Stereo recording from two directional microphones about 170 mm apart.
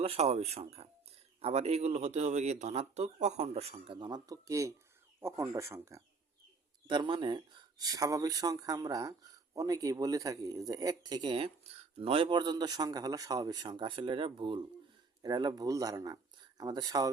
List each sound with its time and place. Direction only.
0.0 s speech: 35° right (ahead or behind); by 6.0 s 15° right (ahead or behind)
6.8 s speech: 30° right (ahead or behind)